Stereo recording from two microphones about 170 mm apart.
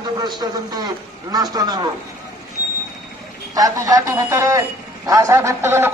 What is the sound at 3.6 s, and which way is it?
A man's voice, 20° right (ahead or behind).